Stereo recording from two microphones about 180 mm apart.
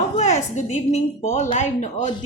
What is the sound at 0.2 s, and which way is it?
A woman's voice, 40° left (ahead or behind).